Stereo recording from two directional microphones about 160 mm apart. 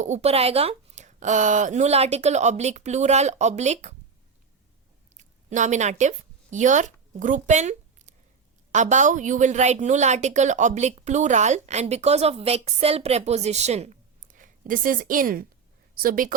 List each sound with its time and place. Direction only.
0.0 s a woman's voice: 45° right (ahead or behind)
5.1 s a woman's voice: 50° right (ahead or behind)